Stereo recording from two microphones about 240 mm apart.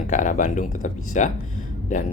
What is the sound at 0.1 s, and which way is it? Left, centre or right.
Speech, left.